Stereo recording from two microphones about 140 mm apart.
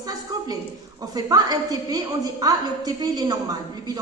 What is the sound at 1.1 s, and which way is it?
A woman's voice, 25° right (ahead or behind).